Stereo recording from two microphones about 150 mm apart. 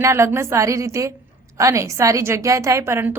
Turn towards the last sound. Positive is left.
turn(degrees=-15)  # may be behind; listen again after turning